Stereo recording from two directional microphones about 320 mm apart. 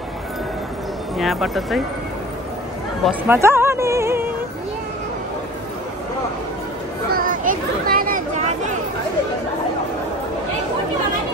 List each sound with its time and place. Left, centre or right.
1.1 s speech: centre
3.1 s music: centre
7.1 s a sound: right